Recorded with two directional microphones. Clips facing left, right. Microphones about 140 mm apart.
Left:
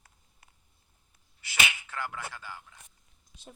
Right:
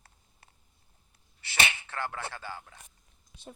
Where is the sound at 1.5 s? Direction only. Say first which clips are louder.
Right 1 dB; 30° right (ahead or behind).